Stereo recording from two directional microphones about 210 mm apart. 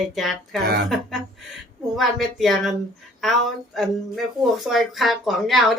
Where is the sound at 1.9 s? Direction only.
Centre (ahead or behind).